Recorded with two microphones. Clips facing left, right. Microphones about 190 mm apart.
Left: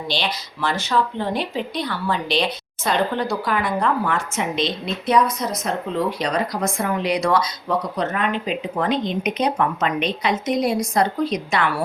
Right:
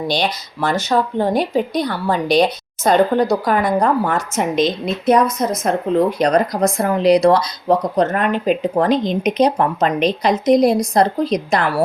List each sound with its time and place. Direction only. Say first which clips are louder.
0.1 s speech: right 6 dB; 45° right (ahead or behind)